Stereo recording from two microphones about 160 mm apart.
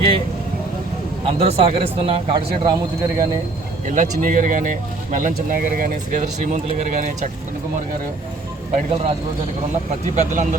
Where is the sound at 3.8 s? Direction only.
55° right (ahead or behind).